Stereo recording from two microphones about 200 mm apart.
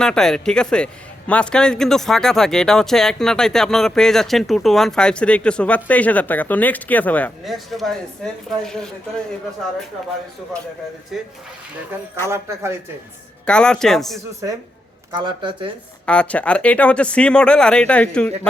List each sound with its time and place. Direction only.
0.0 s speech: 5° left (ahead or behind)
12.3 s speech: 15° right (ahead or behind)
13.4 s speech: 5° left (ahead or behind)
15.1 s speech: 25° right (ahead or behind)
16.0 s speech: 5° left (ahead or behind)